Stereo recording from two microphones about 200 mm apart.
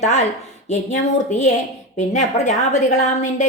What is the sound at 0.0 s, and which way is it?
A woman's voice, 35° left (ahead or behind).